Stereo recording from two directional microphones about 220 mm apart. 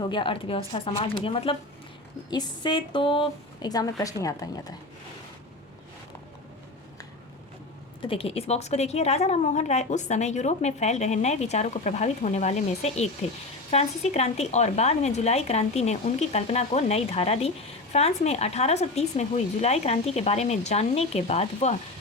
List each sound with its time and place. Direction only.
0.0 s a woman's voice: 20° left (ahead or behind)
8.0 s a woman's voice: 25° left (ahead or behind)